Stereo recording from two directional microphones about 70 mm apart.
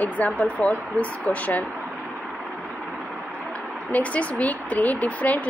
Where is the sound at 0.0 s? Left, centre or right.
Left.